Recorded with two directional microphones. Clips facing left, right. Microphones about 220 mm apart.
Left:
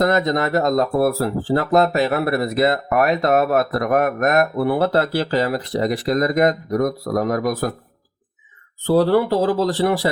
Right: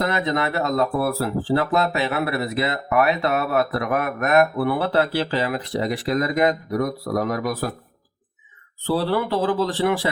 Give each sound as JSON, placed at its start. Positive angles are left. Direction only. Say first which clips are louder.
{"t": 0.0, "sound": "speech", "louder": "left 5 dB", "side_deg": 40}
{"t": 8.9, "sound": "speech", "louder": "left 6 dB", "side_deg": 45}